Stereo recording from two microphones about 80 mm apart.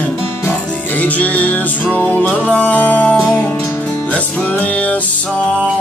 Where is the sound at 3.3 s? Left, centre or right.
Left.